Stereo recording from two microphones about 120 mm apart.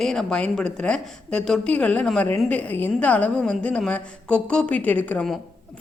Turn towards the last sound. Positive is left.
turn(degrees=15)  # may be behind; listen again after turning